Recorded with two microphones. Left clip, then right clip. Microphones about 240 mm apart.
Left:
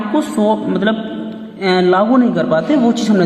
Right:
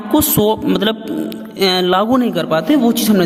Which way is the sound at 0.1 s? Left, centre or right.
Right.